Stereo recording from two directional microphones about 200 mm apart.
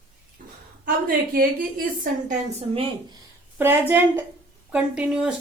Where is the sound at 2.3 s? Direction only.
30° right (ahead or behind).